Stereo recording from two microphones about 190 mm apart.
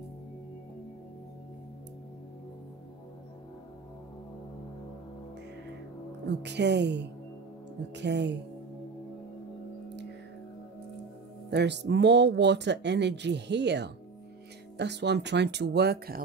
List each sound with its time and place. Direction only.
6.2 s speech: 65° right (ahead or behind)
11.5 s speech: 65° right (ahead or behind)